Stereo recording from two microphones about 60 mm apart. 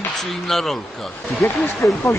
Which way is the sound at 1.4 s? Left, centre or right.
Left.